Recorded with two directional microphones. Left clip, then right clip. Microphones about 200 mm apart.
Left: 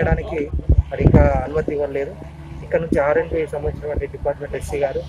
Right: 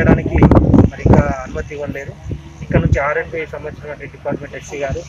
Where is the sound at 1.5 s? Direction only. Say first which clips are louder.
Left 4 dB; 10° left (ahead or behind).